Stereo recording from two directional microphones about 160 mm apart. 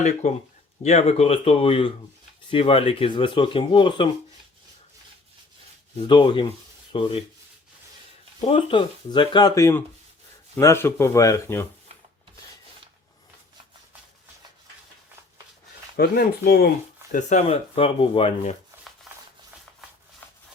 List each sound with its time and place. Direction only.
0.0 s speech: 50° left (ahead or behind); by 4.1 s 30° left (ahead or behind)
6.1 s speech: 30° left (ahead or behind)
8.4 s speech: 35° left (ahead or behind)
16.0 s speech: 75° left (ahead or behind)
17.2 s speech: 50° left (ahead or behind)